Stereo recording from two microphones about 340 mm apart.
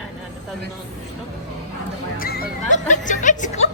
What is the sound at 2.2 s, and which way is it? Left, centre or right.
Speech, left.